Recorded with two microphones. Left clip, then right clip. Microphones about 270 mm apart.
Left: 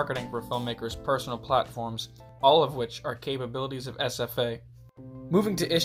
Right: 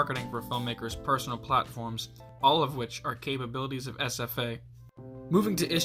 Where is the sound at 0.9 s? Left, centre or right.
Right.